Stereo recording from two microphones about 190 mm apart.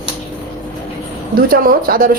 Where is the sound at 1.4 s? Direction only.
50° right (ahead or behind).